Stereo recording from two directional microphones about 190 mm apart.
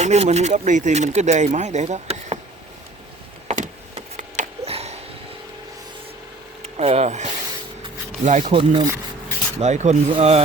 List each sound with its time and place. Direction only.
0.0 s speech: 35° right (ahead or behind)
3.5 s power windows: 40° right (ahead or behind)
6.6 s speech: 35° right (ahead or behind)
9.6 s speech: 35° right (ahead or behind)